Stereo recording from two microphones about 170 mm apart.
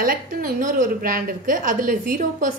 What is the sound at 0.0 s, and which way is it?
A woman's voice, 55° right (ahead or behind).